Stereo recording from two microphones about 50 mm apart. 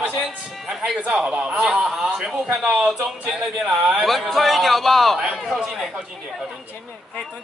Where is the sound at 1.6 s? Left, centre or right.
Centre.